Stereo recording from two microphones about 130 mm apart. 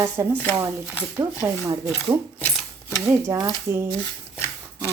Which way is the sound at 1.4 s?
20° right (ahead or behind).